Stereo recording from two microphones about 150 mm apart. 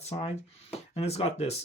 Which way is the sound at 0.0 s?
45° left (ahead or behind).